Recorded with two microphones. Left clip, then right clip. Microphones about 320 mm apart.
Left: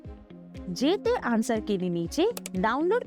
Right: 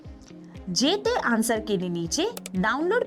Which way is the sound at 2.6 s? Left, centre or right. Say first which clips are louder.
Right 2 dB; right.